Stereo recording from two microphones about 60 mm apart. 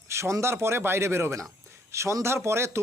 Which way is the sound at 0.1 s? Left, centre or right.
Right.